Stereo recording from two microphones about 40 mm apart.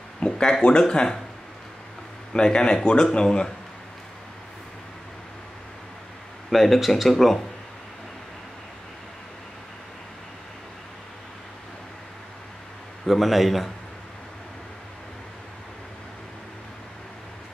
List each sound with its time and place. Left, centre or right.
0.2 s speech: centre
2.3 s speech: left
6.5 s speech: centre
13.0 s speech: centre